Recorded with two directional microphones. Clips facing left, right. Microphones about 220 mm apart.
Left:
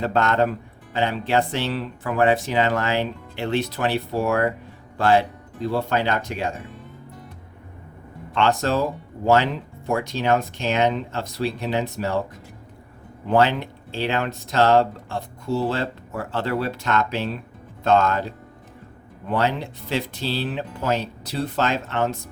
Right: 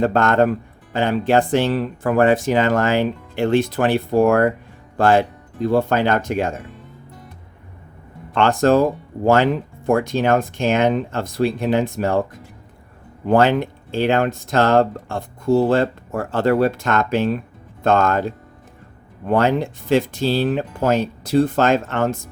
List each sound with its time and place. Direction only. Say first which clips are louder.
0.0 s speech: right 5 dB; 50° right (ahead or behind)
8.4 s speech: right 6 dB; 50° right (ahead or behind)
13.2 s speech: right 4 dB; 50° right (ahead or behind)